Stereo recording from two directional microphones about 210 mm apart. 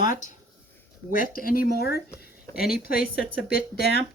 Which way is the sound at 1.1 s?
45° left (ahead or behind).